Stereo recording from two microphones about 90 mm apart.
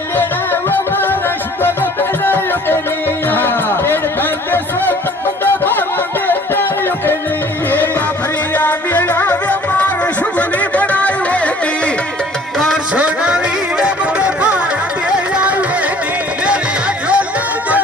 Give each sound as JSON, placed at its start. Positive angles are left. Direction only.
{"t": 0.7, "sound": "music", "side_deg": 25}
{"t": 8.5, "sound": "music", "side_deg": 20}
{"t": 12.5, "sound": "music", "side_deg": 0}
{"t": 12.9, "sound": "music", "side_deg": -15}